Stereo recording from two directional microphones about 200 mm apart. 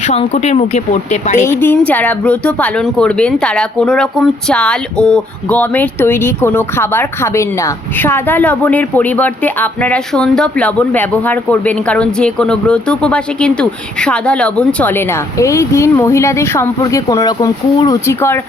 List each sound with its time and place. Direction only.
0.1 s speech: 35° left (ahead or behind)
1.5 s speech: 10° left (ahead or behind)